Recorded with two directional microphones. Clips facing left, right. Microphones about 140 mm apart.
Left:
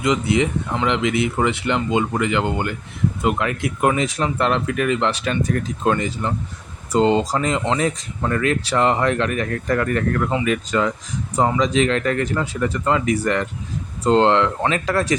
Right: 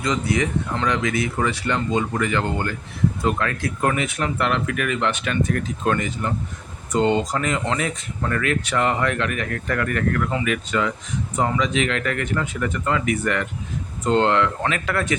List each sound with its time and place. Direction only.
0.0 s speech: 20° left (ahead or behind)
3.9 s speech: 30° left (ahead or behind)